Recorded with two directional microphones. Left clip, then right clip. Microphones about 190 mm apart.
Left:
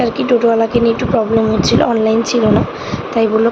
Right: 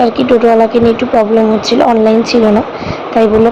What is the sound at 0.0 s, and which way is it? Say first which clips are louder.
Speech: right 4 dB; 15° right (ahead or behind).